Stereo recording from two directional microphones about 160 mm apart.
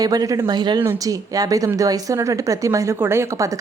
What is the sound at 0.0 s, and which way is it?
A woman's voice, 25° right (ahead or behind).